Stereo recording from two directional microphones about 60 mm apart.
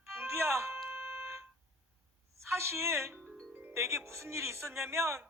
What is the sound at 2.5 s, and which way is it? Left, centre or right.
Music, right.